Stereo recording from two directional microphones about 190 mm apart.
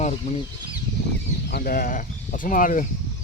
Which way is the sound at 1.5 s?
50° left (ahead or behind).